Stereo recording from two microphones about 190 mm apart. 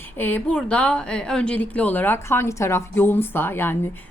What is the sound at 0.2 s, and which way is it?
Speech, 10° left (ahead or behind).